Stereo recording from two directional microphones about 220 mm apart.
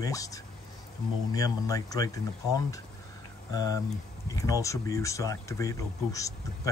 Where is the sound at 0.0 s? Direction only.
15° left (ahead or behind).